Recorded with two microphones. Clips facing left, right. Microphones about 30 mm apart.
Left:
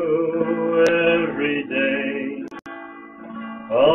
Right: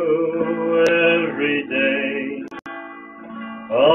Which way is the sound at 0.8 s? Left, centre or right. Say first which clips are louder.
Right 2 dB; centre.